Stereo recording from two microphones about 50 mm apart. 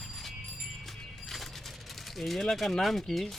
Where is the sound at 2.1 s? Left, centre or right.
Centre.